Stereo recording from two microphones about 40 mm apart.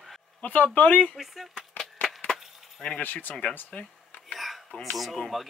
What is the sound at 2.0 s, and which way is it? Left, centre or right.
Wood, centre.